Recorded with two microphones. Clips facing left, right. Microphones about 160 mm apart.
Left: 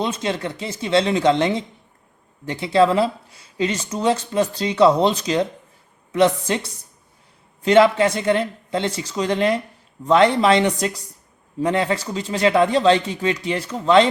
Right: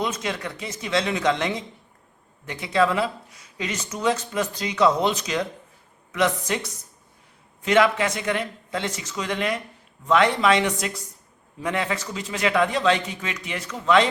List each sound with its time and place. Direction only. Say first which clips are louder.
0.0 s speech: left 4 dB; 30° left (ahead or behind)